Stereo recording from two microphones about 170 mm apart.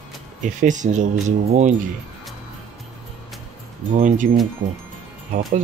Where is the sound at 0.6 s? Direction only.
45° right (ahead or behind).